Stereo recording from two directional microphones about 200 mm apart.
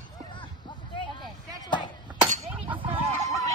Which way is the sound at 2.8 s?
35° right (ahead or behind).